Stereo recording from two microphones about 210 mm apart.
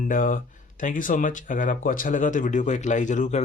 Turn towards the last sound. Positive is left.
turn(degrees=35)  # may be behind; listen again after turning